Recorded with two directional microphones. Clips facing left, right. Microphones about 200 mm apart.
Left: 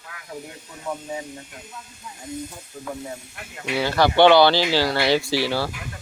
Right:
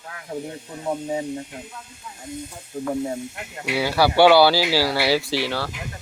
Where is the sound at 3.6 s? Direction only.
10° right (ahead or behind).